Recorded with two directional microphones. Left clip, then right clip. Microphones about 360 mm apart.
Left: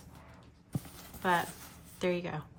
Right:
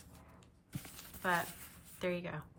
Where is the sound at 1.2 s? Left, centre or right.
Centre.